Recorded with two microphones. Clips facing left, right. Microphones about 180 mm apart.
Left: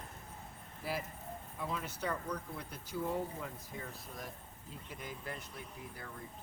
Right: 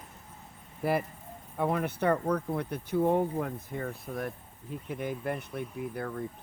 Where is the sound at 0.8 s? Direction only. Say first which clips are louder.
Right 11 dB; 60° right (ahead or behind).